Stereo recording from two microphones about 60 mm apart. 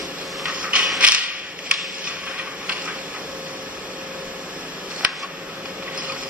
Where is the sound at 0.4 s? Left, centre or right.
Centre.